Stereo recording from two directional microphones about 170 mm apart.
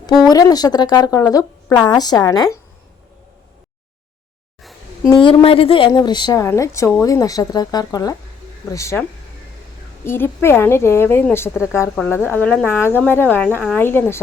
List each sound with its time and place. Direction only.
0.3 s a woman's voice: 20° left (ahead or behind)
5.0 s a woman's voice: 30° left (ahead or behind); by 14.2 s 10° left (ahead or behind)